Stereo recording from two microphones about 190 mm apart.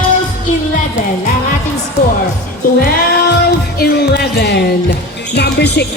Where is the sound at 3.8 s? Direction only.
55° left (ahead or behind).